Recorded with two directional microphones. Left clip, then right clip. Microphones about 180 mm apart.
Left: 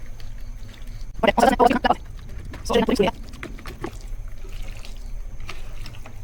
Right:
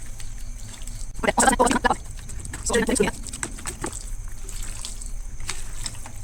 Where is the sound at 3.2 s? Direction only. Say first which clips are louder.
Right 3 dB; 20° right (ahead or behind).